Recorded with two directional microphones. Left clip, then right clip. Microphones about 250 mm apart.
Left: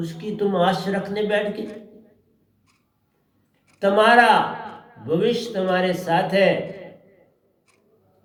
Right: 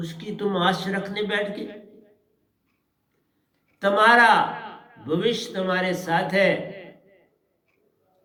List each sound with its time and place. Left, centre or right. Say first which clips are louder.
0.0 s a man's voice: left 4 dB; right
3.8 s a man's voice: left 1 dB; right